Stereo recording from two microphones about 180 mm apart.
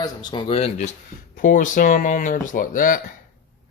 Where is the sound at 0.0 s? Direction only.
25° left (ahead or behind).